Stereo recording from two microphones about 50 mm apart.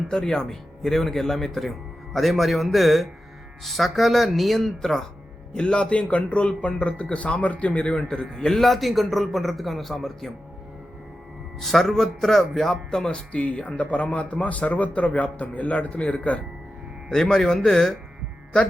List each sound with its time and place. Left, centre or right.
0.1 s a man's voice: centre
5.5 s a man's voice: centre
11.6 s speech: centre
13.3 s speech: left
17.1 s a man's voice: centre